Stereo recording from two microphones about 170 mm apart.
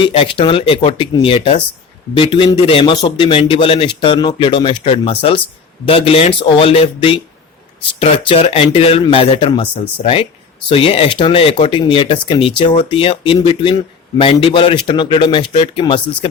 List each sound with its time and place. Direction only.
0.0 s speech: 30° left (ahead or behind)